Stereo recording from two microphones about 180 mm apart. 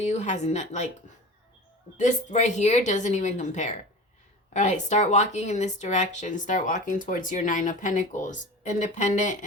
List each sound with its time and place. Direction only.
0.0 s a woman's voice: 40° left (ahead or behind)
2.0 s a woman's voice: 40° left (ahead or behind)